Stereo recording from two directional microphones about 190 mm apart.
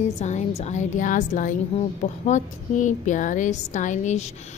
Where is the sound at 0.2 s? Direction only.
35° left (ahead or behind).